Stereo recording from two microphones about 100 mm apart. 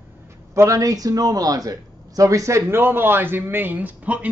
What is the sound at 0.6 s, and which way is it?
A man's voice, 35° right (ahead or behind).